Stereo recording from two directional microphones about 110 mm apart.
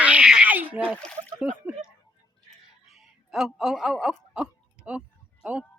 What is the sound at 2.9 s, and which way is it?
Speech, 5° right (ahead or behind).